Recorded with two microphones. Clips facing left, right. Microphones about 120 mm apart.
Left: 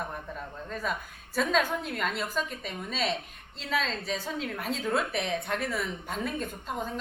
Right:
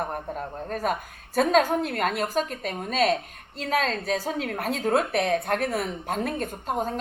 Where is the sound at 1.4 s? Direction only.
45° right (ahead or behind).